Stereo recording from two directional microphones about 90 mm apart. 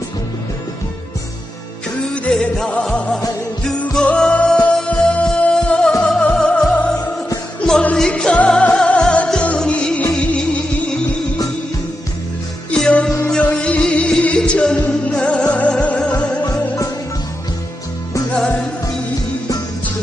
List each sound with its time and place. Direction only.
2.1 s music: 10° left (ahead or behind)
12.7 s music: 10° left (ahead or behind)
16.4 s music: 40° left (ahead or behind)